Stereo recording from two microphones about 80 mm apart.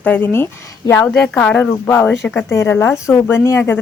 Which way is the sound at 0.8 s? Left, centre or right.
Left.